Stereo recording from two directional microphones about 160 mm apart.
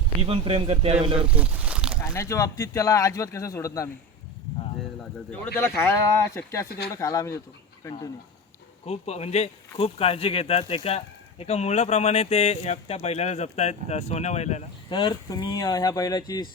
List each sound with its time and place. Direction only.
0.2 s speech: 35° right (ahead or behind)
1.3 s a sound: 10° right (ahead or behind)
2.0 s speech: 15° left (ahead or behind)
5.5 s speech: 15° left (ahead or behind)
8.9 s speech: 40° left (ahead or behind)
14.8 s speech: 30° left (ahead or behind)